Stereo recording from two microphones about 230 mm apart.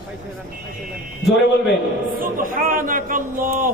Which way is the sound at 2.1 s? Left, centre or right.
Right.